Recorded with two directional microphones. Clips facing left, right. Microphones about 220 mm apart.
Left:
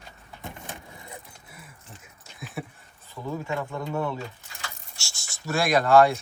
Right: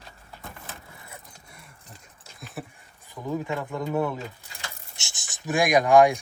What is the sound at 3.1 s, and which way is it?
Speech, 15° right (ahead or behind).